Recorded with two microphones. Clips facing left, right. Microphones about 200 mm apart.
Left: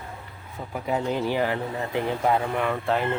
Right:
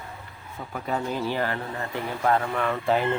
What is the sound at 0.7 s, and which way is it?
Speech, 15° left (ahead or behind).